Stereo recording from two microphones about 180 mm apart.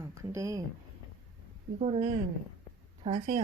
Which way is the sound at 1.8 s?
35° right (ahead or behind).